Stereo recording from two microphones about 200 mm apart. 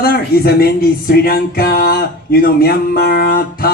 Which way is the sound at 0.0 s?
50° left (ahead or behind).